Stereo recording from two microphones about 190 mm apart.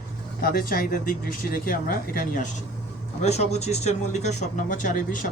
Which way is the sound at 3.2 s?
35° left (ahead or behind).